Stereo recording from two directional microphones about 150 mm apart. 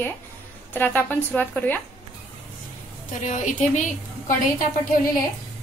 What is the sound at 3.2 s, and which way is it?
Speech, 55° left (ahead or behind).